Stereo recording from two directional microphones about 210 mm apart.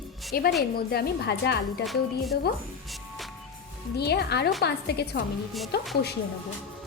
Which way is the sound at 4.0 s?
50° left (ahead or behind).